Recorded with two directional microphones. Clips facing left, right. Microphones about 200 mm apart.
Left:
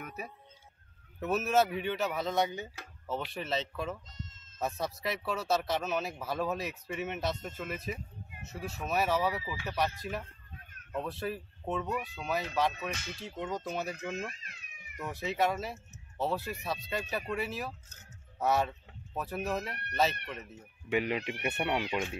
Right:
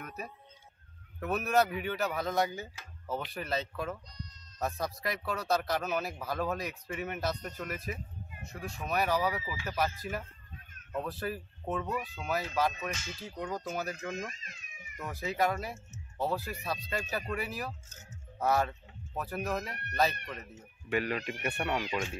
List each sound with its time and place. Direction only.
0.0 s music: 10° left (ahead or behind)
1.2 s speech: 5° left (ahead or behind)
4.1 s bleat: 25° left (ahead or behind)
4.6 s speech: centre (ahead or behind)
12.7 s speech: 60° left (ahead or behind)
13.2 s speech: centre (ahead or behind)
14.3 s cat: 60° left (ahead or behind)
15.0 s speech: centre (ahead or behind)
20.9 s speech: 15° left (ahead or behind)